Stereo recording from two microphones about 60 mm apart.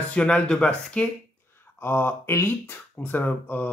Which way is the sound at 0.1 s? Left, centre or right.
Left.